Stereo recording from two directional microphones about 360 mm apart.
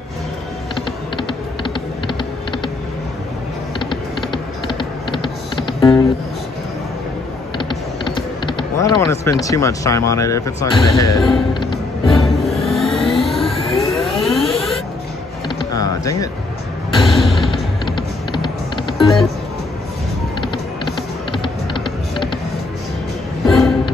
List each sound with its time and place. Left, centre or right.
1.1 s typing: centre
3.9 s typing: centre
7.5 s typing: centre
9.4 s speech: centre
10.9 s speech: left
11.1 s speech: centre
11.7 s music: centre
15.7 s a sound: centre
17.1 s music: centre
17.5 s music: centre
18.9 s music: centre
21.3 s typing: centre
23.4 s a sound: centre